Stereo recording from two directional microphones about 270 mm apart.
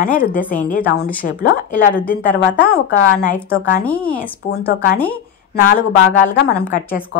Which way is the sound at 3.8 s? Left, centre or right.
Centre.